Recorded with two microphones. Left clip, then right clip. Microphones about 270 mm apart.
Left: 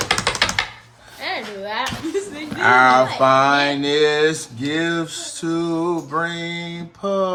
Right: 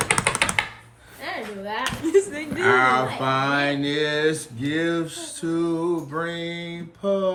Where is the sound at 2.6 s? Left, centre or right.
Centre.